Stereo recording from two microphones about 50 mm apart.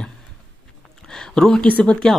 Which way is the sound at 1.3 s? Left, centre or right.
Centre.